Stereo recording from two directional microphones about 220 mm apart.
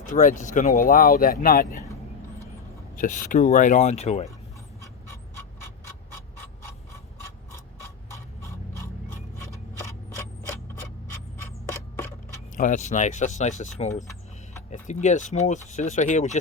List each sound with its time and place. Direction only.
0.0 s speech: 35° left (ahead or behind)
2.9 s speech: 35° left (ahead or behind)
7.5 s a sound: 15° left (ahead or behind)
11.7 s a sound: 10° left (ahead or behind)
12.5 s speech: 35° left (ahead or behind)
13.9 s vehicle: 15° left (ahead or behind)
14.7 s speech: 30° left (ahead or behind)